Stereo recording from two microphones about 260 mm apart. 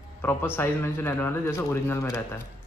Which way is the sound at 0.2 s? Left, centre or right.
Centre.